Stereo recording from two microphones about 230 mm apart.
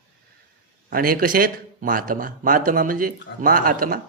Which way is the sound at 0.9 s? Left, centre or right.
Right.